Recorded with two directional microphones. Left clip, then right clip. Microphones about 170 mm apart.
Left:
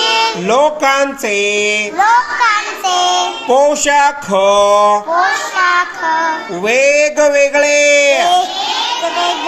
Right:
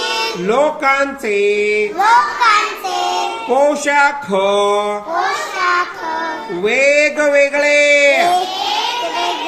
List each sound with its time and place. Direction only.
0.0 s music: 20° left (ahead or behind)
0.4 s speech: 35° left (ahead or behind)
2.0 s child singing: 25° left (ahead or behind)
3.5 s speech: 35° left (ahead or behind)
6.7 s speech: 35° left (ahead or behind)